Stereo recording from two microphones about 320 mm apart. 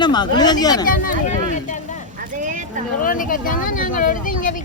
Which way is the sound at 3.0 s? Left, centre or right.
Left.